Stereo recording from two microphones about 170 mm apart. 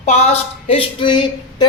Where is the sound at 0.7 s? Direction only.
30° left (ahead or behind).